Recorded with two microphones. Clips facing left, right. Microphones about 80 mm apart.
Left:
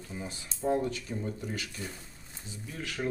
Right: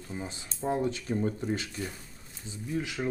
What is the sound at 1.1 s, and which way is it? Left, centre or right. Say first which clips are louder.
Speech: right 6 dB; right.